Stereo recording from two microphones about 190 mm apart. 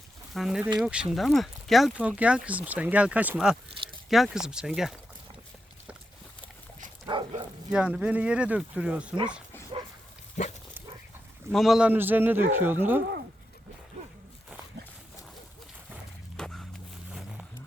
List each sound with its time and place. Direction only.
0.3 s speech: 5° right (ahead or behind)
7.0 s dog: 25° right (ahead or behind)
7.7 s speech: 5° right (ahead or behind)
10.4 s dog: 40° left (ahead or behind)
11.5 s speech: centre (ahead or behind)
16.4 s walk: 5° left (ahead or behind)
17.1 s a sound: 5° right (ahead or behind)